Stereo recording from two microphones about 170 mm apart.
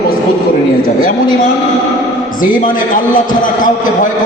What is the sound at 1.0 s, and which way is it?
Speech, 55° left (ahead or behind).